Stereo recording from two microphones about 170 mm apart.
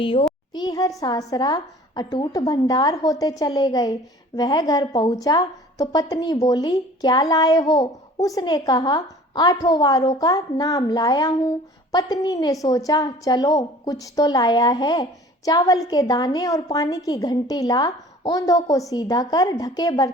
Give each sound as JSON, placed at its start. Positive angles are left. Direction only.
{"t": 0.0, "sound": "a child's voice", "side_deg": 30}